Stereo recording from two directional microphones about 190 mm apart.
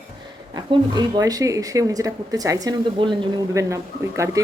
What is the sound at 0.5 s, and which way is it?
Speech, 25° right (ahead or behind).